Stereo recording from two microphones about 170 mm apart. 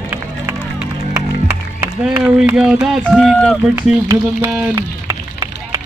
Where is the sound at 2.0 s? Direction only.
5° right (ahead or behind).